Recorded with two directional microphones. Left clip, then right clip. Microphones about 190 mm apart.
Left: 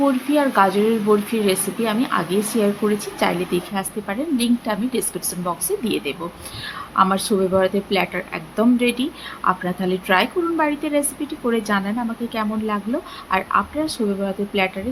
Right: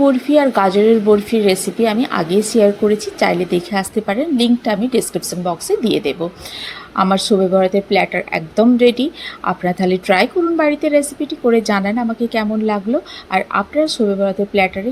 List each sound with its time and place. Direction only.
0.3 s a woman's voice: 25° right (ahead or behind)